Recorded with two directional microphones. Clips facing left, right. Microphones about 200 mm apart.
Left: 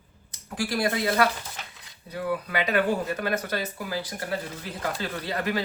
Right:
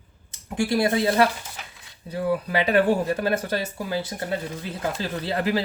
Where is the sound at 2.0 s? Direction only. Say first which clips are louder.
Right 5 dB; 30° right (ahead or behind).